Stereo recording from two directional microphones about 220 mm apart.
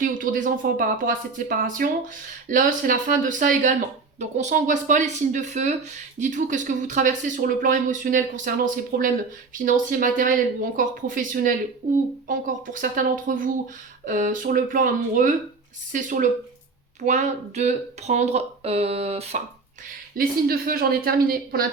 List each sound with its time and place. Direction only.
0.0 s speech: 35° right (ahead or behind)
20.1 s speech: 40° right (ahead or behind)